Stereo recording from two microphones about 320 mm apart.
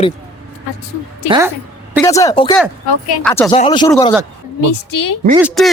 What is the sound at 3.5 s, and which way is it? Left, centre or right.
Speech, centre.